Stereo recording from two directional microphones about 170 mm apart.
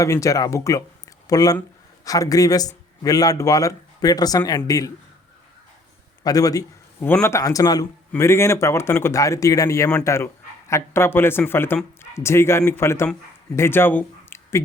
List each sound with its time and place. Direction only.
0.0 s speech: 20° left (ahead or behind)
6.2 s speech: 20° left (ahead or behind)